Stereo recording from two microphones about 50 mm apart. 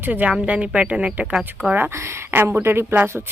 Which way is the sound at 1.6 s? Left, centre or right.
Right.